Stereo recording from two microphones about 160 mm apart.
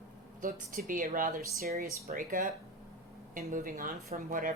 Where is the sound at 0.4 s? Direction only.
60° right (ahead or behind).